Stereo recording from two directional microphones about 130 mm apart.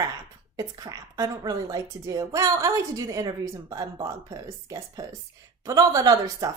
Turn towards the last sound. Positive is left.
turn(degrees=-30)  # may be behind; listen again after turning